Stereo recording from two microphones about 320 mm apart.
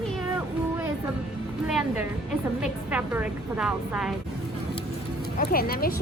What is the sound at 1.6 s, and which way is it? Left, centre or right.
A woman's voice, centre.